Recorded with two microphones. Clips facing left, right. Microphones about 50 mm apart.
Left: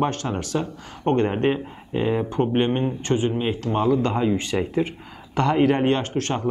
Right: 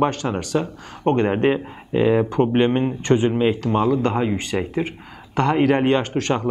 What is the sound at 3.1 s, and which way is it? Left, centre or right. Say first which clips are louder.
Speech: right 5 dB; right.